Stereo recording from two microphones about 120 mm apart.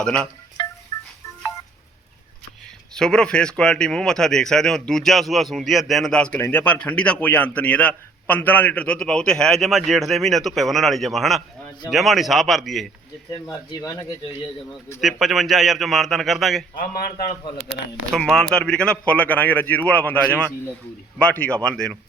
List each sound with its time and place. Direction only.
0.0 s speech: 5° left (ahead or behind)
0.6 s wind chime: 40° left (ahead or behind)
2.9 s speech: 5° left (ahead or behind)
13.5 s speech: 30° left (ahead or behind)
15.0 s speech: centre (ahead or behind)
18.1 s speech: 5° left (ahead or behind)